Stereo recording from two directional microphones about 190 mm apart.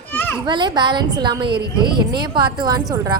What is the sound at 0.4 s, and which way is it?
A child's voice, 25° right (ahead or behind).